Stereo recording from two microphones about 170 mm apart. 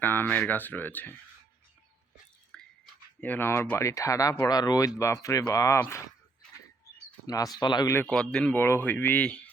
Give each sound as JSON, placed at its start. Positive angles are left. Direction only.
{"t": 0.0, "sound": "speech", "side_deg": 10}
{"t": 2.5, "sound": "a sound", "side_deg": 5}
{"t": 3.2, "sound": "speech", "side_deg": 10}
{"t": 7.3, "sound": "speech", "side_deg": 20}
{"t": 7.9, "sound": "speech", "side_deg": 5}